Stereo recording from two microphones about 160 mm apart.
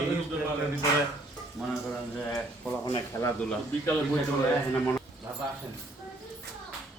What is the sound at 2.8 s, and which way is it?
Speech, 25° left (ahead or behind).